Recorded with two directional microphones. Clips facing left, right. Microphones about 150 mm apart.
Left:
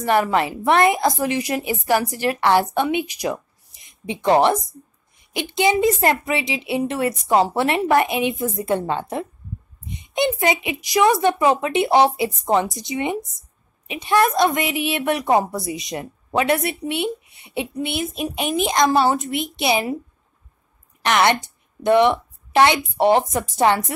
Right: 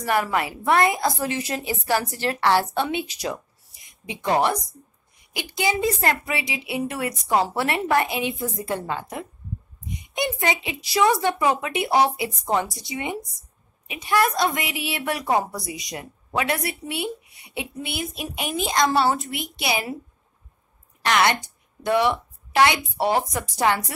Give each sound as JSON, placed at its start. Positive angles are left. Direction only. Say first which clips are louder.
{"t": 0.0, "sound": "a woman's voice", "louder": "left 5 dB", "side_deg": 25}
{"t": 21.0, "sound": "a woman's voice", "louder": "left 3 dB", "side_deg": 20}